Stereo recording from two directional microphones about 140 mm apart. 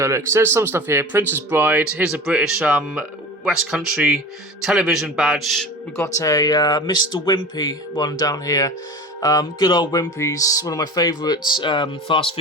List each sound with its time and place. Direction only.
0.0 s a man's voice: 20° right (ahead or behind); by 5.6 s centre (ahead or behind)
6.1 s speech: 25° left (ahead or behind)